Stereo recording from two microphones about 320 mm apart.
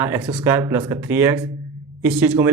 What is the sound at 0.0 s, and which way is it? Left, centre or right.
A man's voice, centre.